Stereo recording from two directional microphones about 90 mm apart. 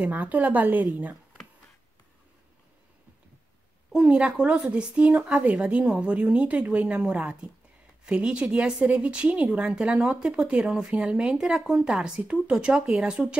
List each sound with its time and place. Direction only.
0.0 s a woman's voice: 15° right (ahead or behind)
3.9 s speech: 10° right (ahead or behind)